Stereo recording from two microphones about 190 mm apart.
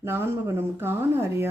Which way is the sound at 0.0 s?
10° right (ahead or behind).